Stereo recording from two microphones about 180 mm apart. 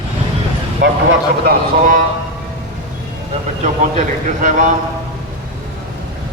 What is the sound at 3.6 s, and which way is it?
A man's voice, 45° right (ahead or behind).